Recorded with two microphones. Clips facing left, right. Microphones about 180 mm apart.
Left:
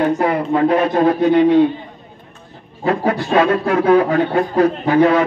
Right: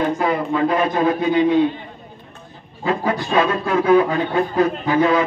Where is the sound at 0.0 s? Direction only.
65° left (ahead or behind).